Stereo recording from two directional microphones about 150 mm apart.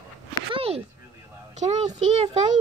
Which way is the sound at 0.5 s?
40° right (ahead or behind).